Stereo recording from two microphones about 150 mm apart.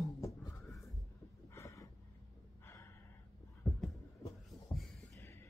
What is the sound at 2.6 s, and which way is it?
Gasp, 15° left (ahead or behind).